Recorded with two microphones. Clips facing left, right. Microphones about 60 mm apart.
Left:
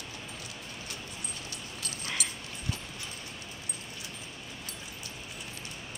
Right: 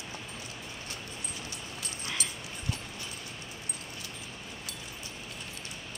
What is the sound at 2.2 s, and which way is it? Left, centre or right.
Dog, right.